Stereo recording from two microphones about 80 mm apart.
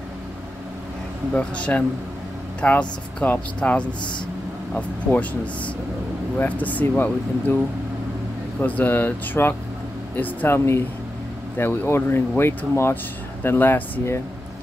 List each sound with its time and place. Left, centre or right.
1.3 s speech: centre
8.5 s speech: centre